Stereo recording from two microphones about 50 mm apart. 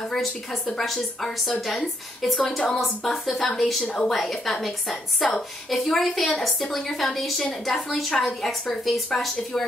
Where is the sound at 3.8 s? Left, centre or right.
Centre.